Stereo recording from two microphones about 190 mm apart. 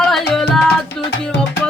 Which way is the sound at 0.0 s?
Centre (ahead or behind).